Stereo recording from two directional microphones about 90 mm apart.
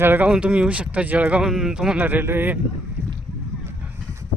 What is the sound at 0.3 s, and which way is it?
Speech, 10° right (ahead or behind).